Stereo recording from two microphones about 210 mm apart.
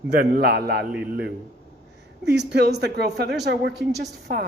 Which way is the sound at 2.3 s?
55° right (ahead or behind).